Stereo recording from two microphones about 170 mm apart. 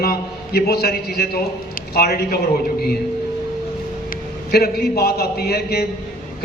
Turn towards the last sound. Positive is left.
turn(degrees=70)  # may be behind; listen again after turning